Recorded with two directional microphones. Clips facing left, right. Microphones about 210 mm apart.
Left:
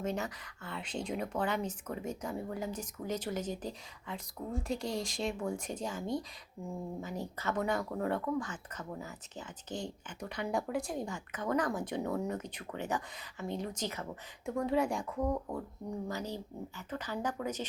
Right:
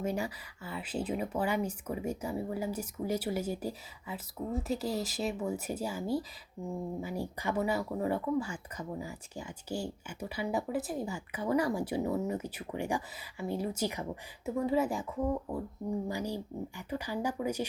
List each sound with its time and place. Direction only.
0.0 s speech: 10° right (ahead or behind)
7.0 s speech: 10° right (ahead or behind)